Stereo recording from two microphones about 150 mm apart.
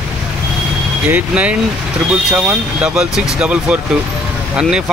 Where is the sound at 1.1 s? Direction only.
10° right (ahead or behind).